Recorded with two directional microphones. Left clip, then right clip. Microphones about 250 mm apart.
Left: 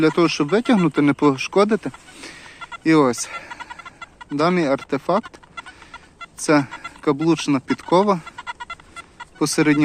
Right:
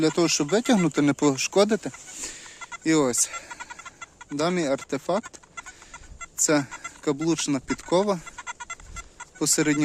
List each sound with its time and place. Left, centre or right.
0.0 s speech: centre
6.4 s speech: centre
9.4 s speech: centre